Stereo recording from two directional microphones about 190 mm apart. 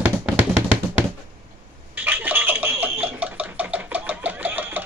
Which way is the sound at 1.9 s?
10° right (ahead or behind).